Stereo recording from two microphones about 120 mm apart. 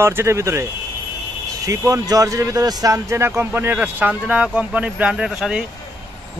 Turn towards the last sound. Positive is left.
turn(degrees=-5)  # may be behind; listen again after turning